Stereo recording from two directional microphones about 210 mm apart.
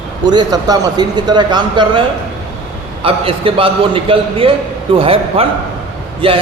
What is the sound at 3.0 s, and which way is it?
A man's voice, 25° right (ahead or behind).